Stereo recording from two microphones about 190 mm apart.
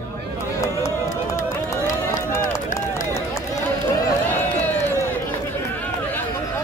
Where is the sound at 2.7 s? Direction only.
40° left (ahead or behind).